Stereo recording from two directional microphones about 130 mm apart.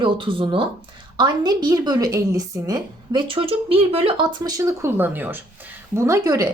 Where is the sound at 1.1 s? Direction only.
30° right (ahead or behind); by 4.2 s 45° right (ahead or behind).